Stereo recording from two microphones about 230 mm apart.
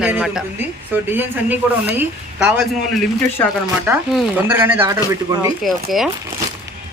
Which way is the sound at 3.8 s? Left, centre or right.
Centre.